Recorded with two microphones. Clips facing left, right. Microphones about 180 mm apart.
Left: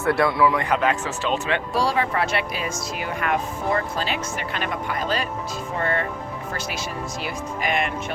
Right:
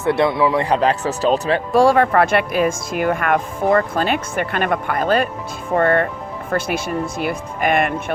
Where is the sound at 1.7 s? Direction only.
55° right (ahead or behind).